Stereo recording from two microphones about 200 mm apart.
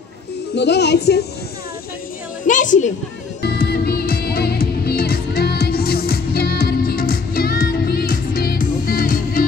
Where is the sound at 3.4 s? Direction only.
55° left (ahead or behind).